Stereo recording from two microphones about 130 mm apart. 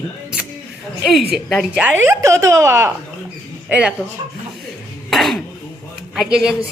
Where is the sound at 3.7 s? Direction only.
10° right (ahead or behind).